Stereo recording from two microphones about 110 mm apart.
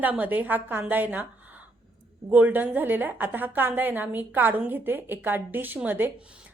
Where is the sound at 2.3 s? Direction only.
15° right (ahead or behind).